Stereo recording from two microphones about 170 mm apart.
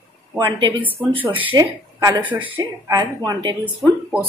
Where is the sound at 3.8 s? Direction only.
5° right (ahead or behind).